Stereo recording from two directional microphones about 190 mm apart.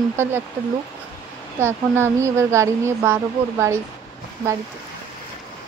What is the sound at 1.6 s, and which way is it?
Speech, 15° right (ahead or behind).